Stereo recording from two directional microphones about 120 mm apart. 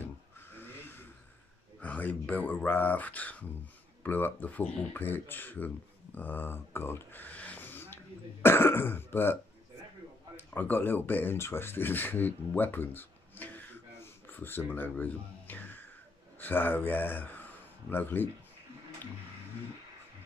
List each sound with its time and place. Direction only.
0.0 s vehicle: 15° left (ahead or behind)
1.8 s speech: 15° left (ahead or behind)